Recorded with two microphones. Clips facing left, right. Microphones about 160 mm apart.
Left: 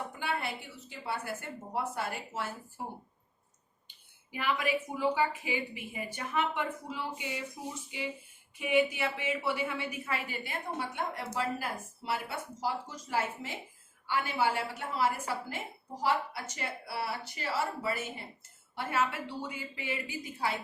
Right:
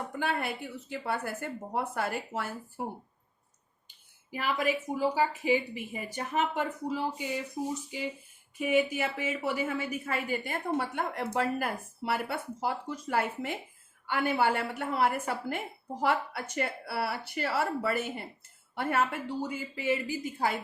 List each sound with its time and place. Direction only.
0.2 s a woman's voice: 50° right (ahead or behind)
3.8 s a woman's voice: 40° right (ahead or behind)
8.5 s a woman's voice: 45° right (ahead or behind)